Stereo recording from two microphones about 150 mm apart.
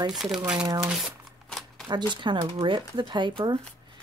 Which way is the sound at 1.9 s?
30° right (ahead or behind).